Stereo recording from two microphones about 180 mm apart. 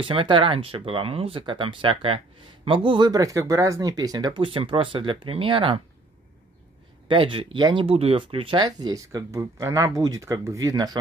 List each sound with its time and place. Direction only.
0.0 s speech: 30° right (ahead or behind)
7.1 s speech: 30° right (ahead or behind)